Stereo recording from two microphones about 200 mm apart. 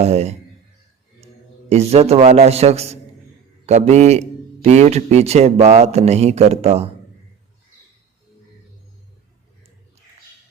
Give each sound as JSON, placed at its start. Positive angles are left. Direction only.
{"t": 0.0, "sound": "a man's voice", "side_deg": -30}
{"t": 1.7, "sound": "a man's voice", "side_deg": -30}